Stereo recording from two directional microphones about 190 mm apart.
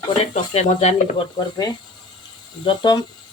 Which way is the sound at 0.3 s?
35° left (ahead or behind).